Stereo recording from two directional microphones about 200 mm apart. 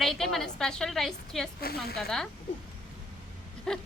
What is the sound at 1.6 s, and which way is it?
Speech, 50° left (ahead or behind).